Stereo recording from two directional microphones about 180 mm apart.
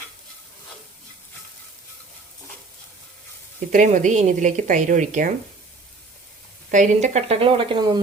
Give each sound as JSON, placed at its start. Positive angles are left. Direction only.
{"t": 3.7, "sound": "a woman's voice", "side_deg": -45}
{"t": 6.7, "sound": "a woman's voice", "side_deg": -45}